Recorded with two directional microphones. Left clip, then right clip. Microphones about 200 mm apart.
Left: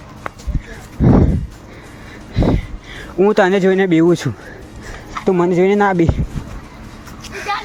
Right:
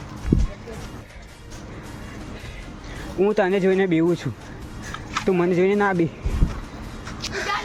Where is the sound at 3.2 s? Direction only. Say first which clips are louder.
Left 7 dB; 25° left (ahead or behind).